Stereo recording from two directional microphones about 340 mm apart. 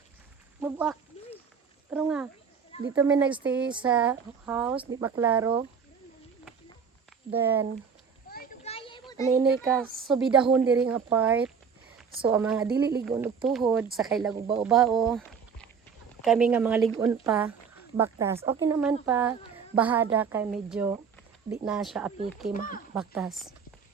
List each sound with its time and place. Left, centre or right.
0.6 s speech: centre
1.1 s a sound: centre
1.9 s speech: centre
7.3 s speech: centre
8.3 s children playing: left
9.3 s speech: centre
22.5 s speech: left
23.0 s speech: centre